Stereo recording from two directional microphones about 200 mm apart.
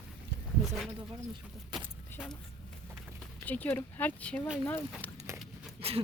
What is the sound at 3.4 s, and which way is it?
Speech, 10° left (ahead or behind).